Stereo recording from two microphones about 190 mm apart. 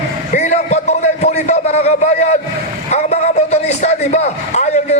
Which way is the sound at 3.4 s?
35° left (ahead or behind).